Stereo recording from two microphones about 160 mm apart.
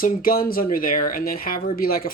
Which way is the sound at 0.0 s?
65° left (ahead or behind).